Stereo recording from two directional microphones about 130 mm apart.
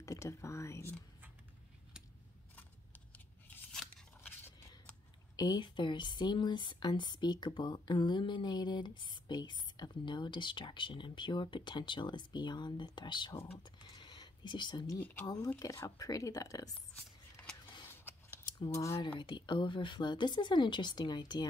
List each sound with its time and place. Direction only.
0.0 s speech: 25° left (ahead or behind)
3.7 s scissors: 5° left (ahead or behind)
5.3 s speech: 30° left (ahead or behind)
13.6 s a sound: 35° left (ahead or behind)
15.0 s speech: 15° left (ahead or behind)
15.2 s speech: 25° left (ahead or behind)
16.9 s a sound: 10° left (ahead or behind)
18.7 s speech: 20° left (ahead or behind)
18.9 s speech: 40° left (ahead or behind)